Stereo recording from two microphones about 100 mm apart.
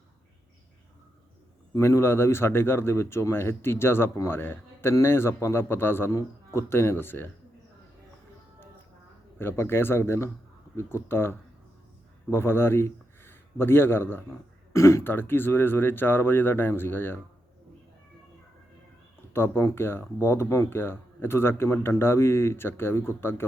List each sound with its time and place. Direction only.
1.7 s speech: 30° left (ahead or behind)
9.4 s a man's voice: 20° left (ahead or behind)
19.3 s speech: 25° left (ahead or behind)